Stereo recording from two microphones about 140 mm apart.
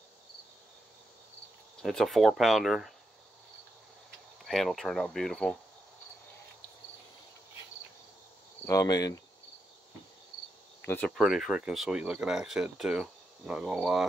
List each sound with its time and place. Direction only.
1.8 s speech: centre (ahead or behind)
4.5 s speech: centre (ahead or behind)
8.6 s speech: 25° left (ahead or behind)
11.1 s speech: centre (ahead or behind)